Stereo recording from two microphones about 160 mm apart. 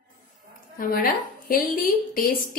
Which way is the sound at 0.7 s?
65° left (ahead or behind).